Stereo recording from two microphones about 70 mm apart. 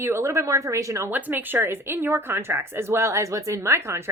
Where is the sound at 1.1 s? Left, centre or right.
Right.